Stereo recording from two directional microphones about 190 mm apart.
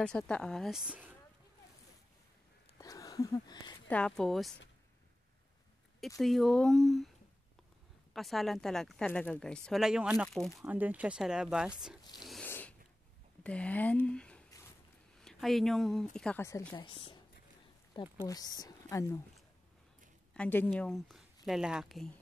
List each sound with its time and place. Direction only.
0.0 s speech: 5° left (ahead or behind)
2.8 s a sound: 20° left (ahead or behind)
3.8 s speech: 5° left (ahead or behind)
5.9 s speech: centre (ahead or behind)
8.1 s speech: centre (ahead or behind)
12.2 s zipper: centre (ahead or behind)
13.4 s speech: 5° left (ahead or behind)
16.7 s a woman's voice: 25° left (ahead or behind)
18.2 s speech: 20° left (ahead or behind)
20.3 s a woman's voice: 10° left (ahead or behind)